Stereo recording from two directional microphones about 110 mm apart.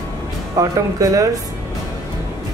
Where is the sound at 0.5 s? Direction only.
30° right (ahead or behind).